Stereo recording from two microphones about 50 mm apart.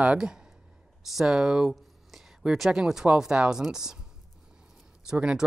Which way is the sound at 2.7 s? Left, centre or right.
Centre.